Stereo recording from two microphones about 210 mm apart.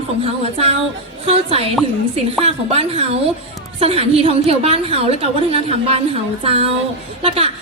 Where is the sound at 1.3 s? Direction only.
30° right (ahead or behind).